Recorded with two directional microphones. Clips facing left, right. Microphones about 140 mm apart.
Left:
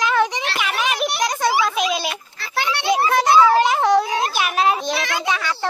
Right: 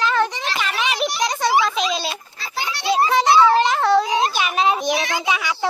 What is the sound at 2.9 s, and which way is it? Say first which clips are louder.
Children playing: even; 5° left (ahead or behind).